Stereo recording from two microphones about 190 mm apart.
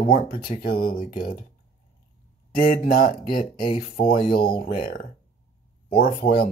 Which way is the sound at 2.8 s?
50° left (ahead or behind).